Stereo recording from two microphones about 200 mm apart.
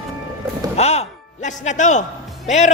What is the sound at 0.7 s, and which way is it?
A man's voice, 30° left (ahead or behind).